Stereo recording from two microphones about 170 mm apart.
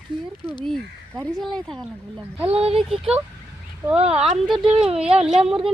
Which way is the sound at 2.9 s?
Centre (ahead or behind).